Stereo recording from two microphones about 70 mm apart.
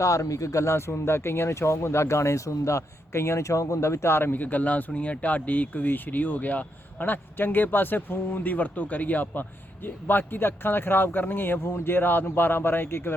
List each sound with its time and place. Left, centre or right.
0.0 s speech: left